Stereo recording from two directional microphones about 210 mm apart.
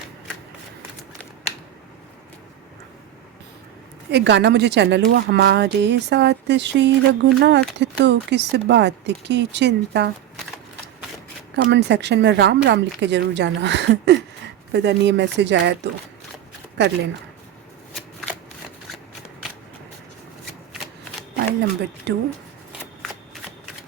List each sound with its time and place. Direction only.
4.1 s a woman's voice: 55° right (ahead or behind)
11.7 s a woman's voice: 55° right (ahead or behind)
21.3 s speech: 55° right (ahead or behind)